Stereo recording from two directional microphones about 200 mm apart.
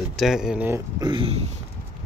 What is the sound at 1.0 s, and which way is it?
Speech, 25° right (ahead or behind).